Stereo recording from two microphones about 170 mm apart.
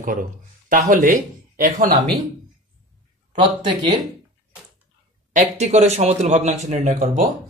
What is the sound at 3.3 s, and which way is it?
Speech, 25° right (ahead or behind).